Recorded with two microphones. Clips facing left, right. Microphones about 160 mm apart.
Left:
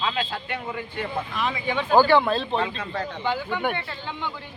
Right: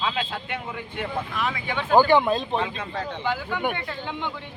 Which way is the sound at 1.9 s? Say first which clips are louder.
Even; 15° right (ahead or behind).